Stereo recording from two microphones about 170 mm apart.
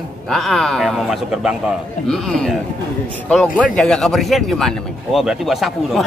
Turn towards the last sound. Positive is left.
turn(degrees=0)  # may be behind; listen again after turning